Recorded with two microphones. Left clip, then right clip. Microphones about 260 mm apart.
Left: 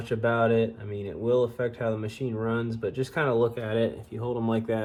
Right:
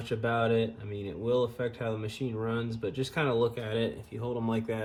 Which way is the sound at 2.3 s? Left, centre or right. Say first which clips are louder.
Left 5 dB; centre.